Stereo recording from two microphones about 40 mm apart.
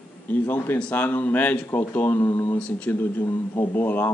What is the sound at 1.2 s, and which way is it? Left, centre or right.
Speech, left.